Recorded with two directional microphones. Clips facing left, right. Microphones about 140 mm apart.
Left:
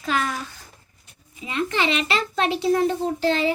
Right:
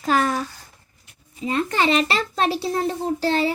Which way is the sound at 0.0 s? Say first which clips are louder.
Right 5 dB; 40° right (ahead or behind).